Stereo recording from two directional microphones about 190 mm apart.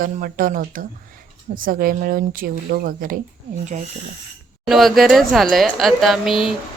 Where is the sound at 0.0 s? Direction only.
45° right (ahead or behind).